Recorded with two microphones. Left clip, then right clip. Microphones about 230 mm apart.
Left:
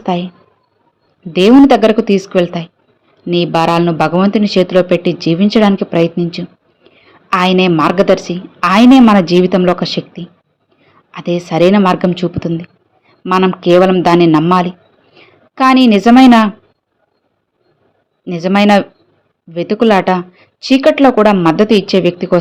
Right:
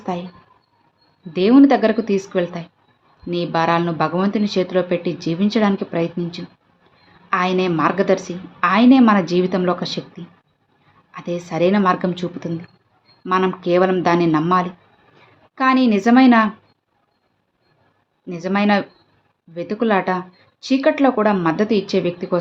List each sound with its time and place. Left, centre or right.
0.0 s speech: left
1.3 s speech: left
18.3 s speech: left